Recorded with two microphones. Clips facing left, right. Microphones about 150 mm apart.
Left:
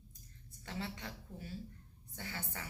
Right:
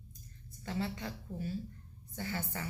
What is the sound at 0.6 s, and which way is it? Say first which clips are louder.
Speech: right 6 dB; 30° right (ahead or behind).